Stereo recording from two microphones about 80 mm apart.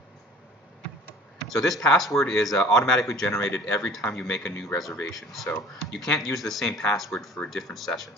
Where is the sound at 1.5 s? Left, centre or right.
Centre.